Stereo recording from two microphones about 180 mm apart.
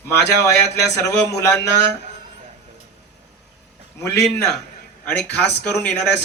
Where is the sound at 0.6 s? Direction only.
70° left (ahead or behind).